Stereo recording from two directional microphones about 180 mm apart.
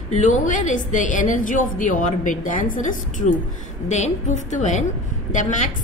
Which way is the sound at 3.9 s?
40° left (ahead or behind).